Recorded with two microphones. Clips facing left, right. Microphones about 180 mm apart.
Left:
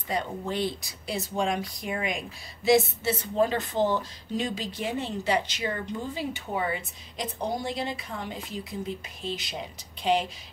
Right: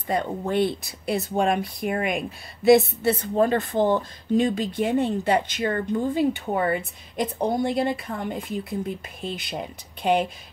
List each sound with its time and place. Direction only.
0.1 s speech: 55° right (ahead or behind)